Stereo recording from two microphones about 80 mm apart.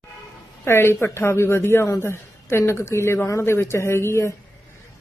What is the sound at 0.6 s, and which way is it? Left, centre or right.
Speech, left.